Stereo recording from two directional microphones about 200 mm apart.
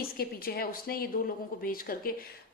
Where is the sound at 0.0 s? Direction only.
50° left (ahead or behind).